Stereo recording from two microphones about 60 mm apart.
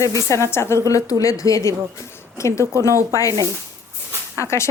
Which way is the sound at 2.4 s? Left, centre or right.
Left.